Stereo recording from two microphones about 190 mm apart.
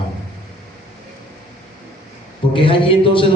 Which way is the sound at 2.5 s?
25° left (ahead or behind).